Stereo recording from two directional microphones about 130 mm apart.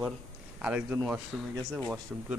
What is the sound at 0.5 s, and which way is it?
Speech, 10° right (ahead or behind).